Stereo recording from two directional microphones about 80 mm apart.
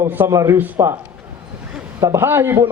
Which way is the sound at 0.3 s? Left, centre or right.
Right.